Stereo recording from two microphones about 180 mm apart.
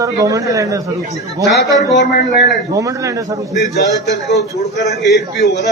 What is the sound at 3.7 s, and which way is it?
A man's voice, 70° left (ahead or behind).